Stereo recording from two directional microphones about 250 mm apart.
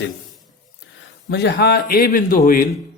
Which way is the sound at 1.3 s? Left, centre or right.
Left.